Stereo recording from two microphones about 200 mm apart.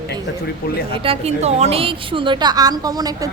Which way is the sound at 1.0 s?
30° right (ahead or behind).